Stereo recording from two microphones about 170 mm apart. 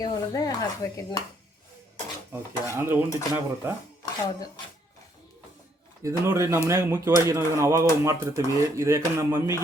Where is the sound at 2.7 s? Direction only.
15° right (ahead or behind).